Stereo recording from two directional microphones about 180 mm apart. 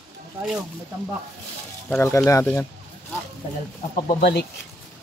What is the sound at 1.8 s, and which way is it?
Speech, 15° left (ahead or behind).